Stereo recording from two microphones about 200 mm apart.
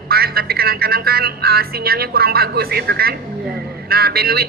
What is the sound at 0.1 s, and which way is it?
A man's voice, 50° right (ahead or behind).